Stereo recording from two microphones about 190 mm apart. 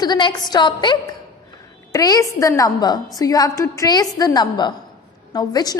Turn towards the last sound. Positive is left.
turn(degrees=20)  # may be behind; listen again after turning